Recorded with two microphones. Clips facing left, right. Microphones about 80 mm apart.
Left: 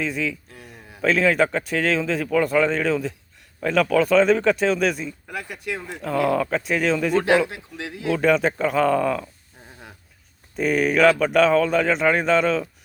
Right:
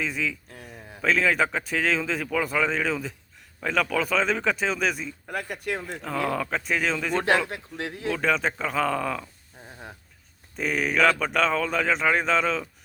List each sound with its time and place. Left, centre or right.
0.0 s a man's voice: centre
5.3 s speech: right
5.9 s a man's voice: centre
7.4 s speech: right
8.1 s a man's voice: centre
10.6 s a man's voice: centre